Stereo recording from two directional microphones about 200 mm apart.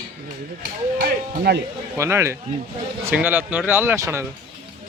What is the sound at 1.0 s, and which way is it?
Speech, 55° right (ahead or behind).